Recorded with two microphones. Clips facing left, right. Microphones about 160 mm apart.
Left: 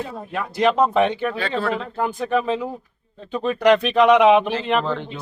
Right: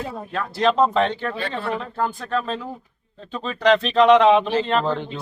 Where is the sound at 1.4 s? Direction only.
90° left.